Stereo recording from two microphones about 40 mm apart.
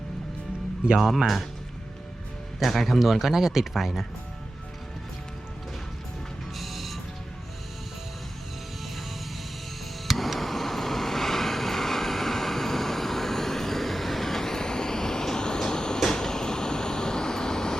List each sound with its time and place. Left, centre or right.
0.9 s speech: centre
2.6 s speech: centre
6.6 s music: centre
10.1 s vehicle: centre